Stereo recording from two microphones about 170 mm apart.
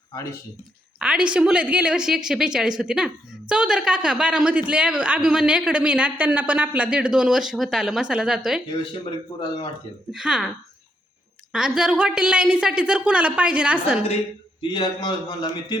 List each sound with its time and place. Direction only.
0.9 s speech: 5° right (ahead or behind)
9.3 s a man's voice: 25° left (ahead or behind)
10.1 s speech: 5° right (ahead or behind)
11.5 s speech: 5° right (ahead or behind)
14.6 s a man's voice: 25° left (ahead or behind)